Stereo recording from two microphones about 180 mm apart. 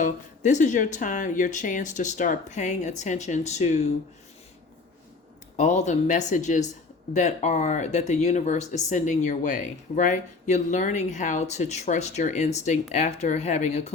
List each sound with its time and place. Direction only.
0.0 s speech: 45° left (ahead or behind)
5.5 s speech: 40° left (ahead or behind)